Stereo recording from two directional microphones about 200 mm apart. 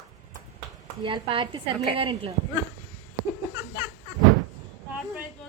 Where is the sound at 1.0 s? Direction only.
25° right (ahead or behind).